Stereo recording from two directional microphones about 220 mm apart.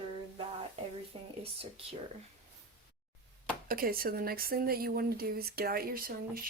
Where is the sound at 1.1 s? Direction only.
20° right (ahead or behind).